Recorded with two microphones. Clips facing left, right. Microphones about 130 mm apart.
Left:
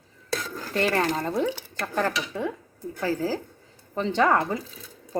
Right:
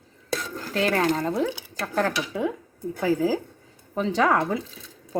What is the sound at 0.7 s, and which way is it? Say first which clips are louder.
Speech: right 1 dB; centre (ahead or behind).